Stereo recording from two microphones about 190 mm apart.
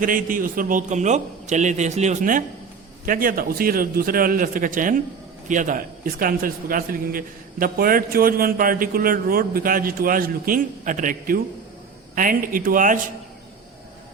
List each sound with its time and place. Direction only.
0.0 s a man's voice: 45° right (ahead or behind)